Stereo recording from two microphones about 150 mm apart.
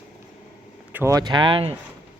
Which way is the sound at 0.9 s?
20° right (ahead or behind).